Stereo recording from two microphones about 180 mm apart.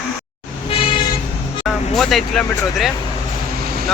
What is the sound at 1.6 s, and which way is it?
Vehicle, centre (ahead or behind).